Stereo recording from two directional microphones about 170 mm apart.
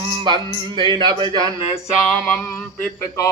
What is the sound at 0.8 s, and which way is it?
Speech, 30° right (ahead or behind).